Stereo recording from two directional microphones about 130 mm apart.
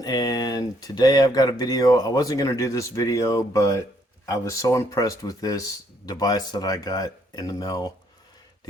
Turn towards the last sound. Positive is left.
turn(degrees=30)  # may be behind; listen again after turning